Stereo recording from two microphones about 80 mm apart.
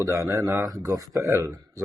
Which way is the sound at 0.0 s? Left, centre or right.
Right.